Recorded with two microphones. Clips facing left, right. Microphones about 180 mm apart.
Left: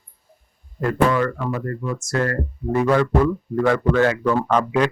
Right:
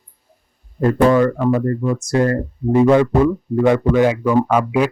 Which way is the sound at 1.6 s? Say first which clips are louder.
Right 7 dB; 25° right (ahead or behind).